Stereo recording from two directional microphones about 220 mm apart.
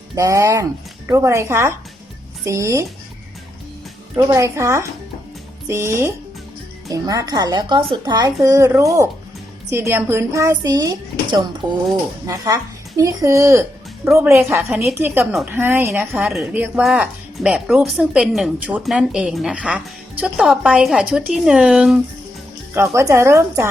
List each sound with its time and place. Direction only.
0.2 s a woman's voice: 15° right (ahead or behind)
4.3 s a woman's voice: 15° right (ahead or behind)